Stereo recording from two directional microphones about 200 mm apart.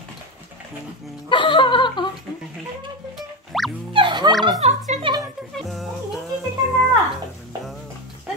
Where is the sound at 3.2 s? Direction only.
Centre (ahead or behind).